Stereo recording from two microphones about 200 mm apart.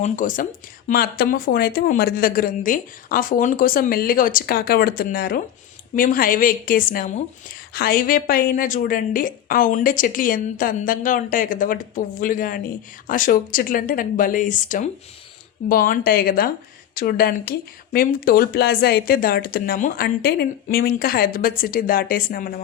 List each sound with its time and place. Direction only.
0.0 s a woman's voice: 40° left (ahead or behind)